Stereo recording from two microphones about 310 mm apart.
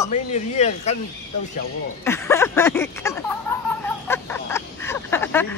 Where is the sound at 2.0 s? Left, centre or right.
Centre.